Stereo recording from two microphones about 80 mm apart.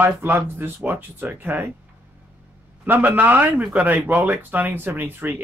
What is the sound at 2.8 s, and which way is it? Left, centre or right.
Speech, right.